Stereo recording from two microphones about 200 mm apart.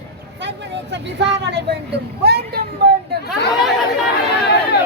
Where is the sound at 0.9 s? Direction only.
60° right (ahead or behind).